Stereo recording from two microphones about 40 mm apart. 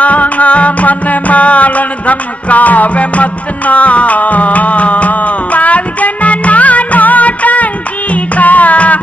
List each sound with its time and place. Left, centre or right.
0.0 s music: left